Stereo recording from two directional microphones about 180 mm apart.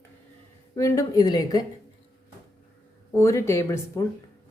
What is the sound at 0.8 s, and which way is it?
Speech, 20° left (ahead or behind).